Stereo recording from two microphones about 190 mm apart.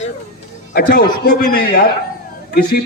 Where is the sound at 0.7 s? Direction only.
55° left (ahead or behind).